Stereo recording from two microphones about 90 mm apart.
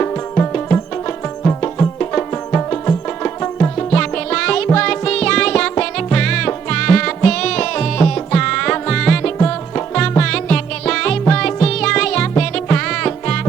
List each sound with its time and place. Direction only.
0.0 s music: 20° left (ahead or behind)